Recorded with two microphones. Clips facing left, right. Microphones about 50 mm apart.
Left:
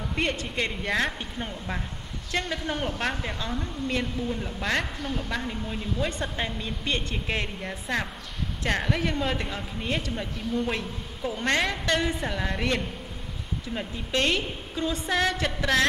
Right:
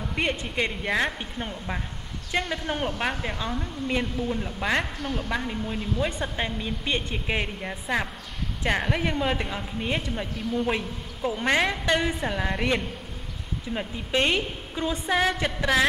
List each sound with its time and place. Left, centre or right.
0.1 s a woman's voice: centre